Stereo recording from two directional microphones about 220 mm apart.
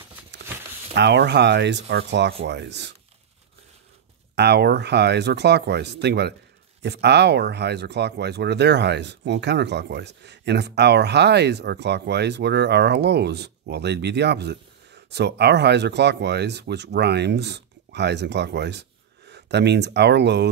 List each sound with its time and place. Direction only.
0.9 s speech: 50° right (ahead or behind)
4.4 s speech: 50° right (ahead or behind)